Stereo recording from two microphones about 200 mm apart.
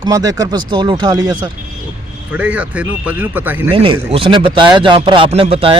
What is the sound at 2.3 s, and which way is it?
Speech, 5° right (ahead or behind).